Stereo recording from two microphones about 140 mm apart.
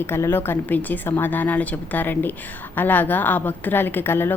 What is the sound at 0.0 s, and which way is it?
A woman's voice, 15° left (ahead or behind).